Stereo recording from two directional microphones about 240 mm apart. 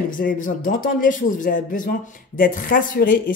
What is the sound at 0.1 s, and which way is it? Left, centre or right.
A man's voice, left.